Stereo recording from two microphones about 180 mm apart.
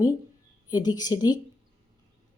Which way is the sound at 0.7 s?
20° left (ahead or behind).